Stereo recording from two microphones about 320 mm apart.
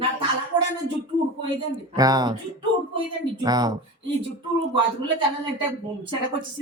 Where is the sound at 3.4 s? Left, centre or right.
Centre.